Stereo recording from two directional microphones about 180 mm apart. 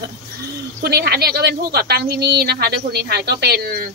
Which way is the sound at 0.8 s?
65° right (ahead or behind).